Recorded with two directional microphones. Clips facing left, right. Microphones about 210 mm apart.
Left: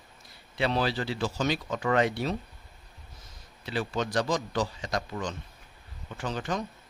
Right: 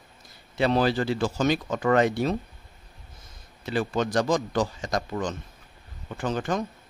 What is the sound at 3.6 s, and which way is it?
Speech, 50° right (ahead or behind).